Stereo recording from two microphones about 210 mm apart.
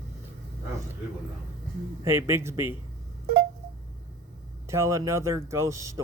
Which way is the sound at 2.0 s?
10° right (ahead or behind).